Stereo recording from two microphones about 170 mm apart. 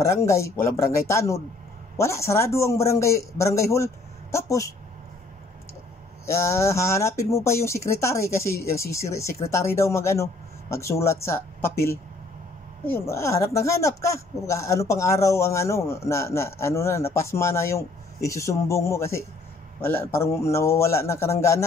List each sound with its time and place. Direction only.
0.0 s speech: 15° left (ahead or behind)
6.2 s speech: 15° left (ahead or behind)